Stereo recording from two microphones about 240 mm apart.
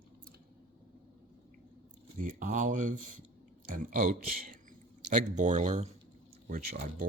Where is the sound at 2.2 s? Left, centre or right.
Right.